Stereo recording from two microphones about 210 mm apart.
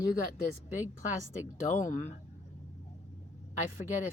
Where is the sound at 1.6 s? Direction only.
35° left (ahead or behind).